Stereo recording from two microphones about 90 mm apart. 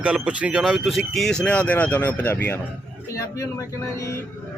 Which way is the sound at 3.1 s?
35° left (ahead or behind).